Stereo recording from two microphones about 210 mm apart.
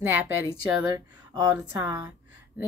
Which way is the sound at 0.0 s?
10° right (ahead or behind).